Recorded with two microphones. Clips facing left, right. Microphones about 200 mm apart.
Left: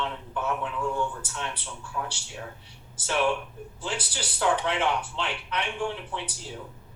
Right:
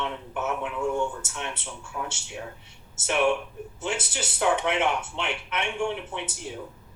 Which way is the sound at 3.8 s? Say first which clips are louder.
Right 3 dB; 25° right (ahead or behind).